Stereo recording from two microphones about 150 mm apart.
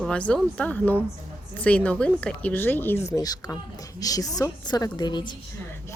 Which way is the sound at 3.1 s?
25° left (ahead or behind).